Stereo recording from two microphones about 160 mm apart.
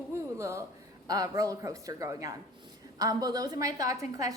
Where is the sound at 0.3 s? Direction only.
15° right (ahead or behind).